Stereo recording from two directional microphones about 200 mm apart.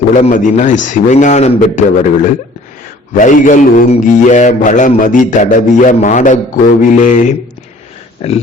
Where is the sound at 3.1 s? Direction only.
40° left (ahead or behind).